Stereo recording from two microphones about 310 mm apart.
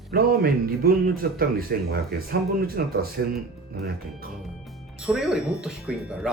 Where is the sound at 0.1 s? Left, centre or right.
Right.